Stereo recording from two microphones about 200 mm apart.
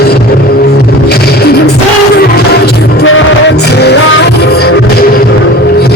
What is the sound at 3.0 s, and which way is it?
Music, 75° left (ahead or behind).